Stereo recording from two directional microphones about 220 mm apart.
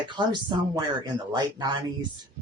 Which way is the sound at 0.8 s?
20° right (ahead or behind).